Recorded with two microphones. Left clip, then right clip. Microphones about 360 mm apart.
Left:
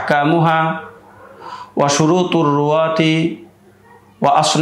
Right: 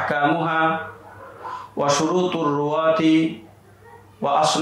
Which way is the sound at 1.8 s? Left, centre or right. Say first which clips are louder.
Left 5 dB; left.